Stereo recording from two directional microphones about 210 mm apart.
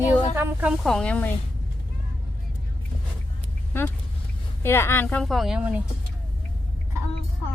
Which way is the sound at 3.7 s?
10° left (ahead or behind).